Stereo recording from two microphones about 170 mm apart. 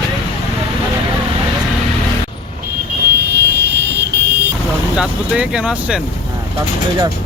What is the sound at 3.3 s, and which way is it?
Vehicle, 85° right.